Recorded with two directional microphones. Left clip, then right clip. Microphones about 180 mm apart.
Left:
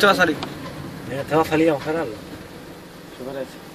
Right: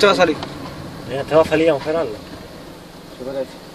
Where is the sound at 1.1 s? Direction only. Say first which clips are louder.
Right 5 dB; 30° right (ahead or behind).